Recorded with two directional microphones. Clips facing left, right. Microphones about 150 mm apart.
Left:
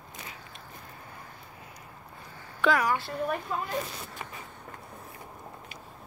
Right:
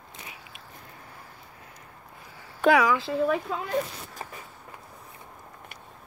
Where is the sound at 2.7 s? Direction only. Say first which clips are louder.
Right 5 dB; 90° right.